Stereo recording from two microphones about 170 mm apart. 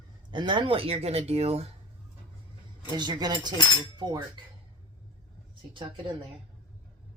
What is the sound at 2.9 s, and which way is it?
Speech, 25° right (ahead or behind).